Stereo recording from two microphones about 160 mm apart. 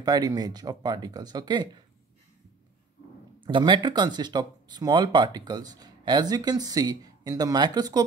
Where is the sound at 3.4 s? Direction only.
30° right (ahead or behind).